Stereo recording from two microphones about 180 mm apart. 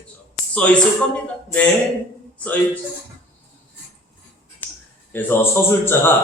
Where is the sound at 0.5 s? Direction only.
5° left (ahead or behind).